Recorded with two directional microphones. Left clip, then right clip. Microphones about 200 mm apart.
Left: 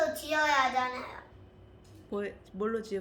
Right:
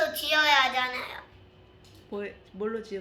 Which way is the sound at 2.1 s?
5° left (ahead or behind).